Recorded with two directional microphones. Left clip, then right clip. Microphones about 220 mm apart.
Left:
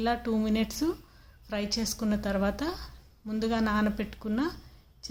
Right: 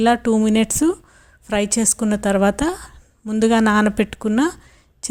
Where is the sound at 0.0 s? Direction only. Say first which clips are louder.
Right 13 dB; 40° right (ahead or behind).